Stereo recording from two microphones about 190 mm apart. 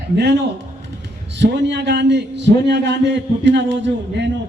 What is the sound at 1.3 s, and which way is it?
A man's voice, 65° right (ahead or behind).